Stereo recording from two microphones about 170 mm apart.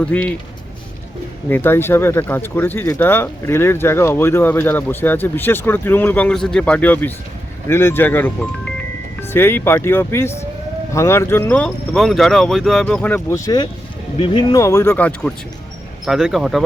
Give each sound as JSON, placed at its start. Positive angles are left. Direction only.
{"t": 0.0, "sound": "speech", "side_deg": 10}
{"t": 1.5, "sound": "speech", "side_deg": 10}
{"t": 13.3, "sound": "speech", "side_deg": 20}
{"t": 16.0, "sound": "speech", "side_deg": 0}